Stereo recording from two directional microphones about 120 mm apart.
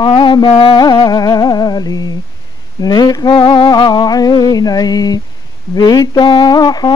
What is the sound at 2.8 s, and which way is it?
Speech, 35° left (ahead or behind).